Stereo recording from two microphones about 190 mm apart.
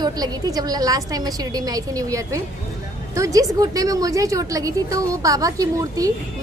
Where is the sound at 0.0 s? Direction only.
20° right (ahead or behind).